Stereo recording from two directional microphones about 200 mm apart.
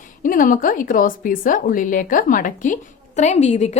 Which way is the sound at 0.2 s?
40° left (ahead or behind).